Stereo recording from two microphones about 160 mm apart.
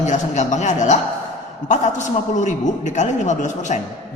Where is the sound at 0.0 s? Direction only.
50° left (ahead or behind).